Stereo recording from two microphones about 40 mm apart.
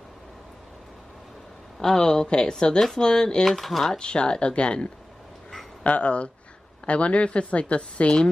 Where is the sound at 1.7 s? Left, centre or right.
Centre.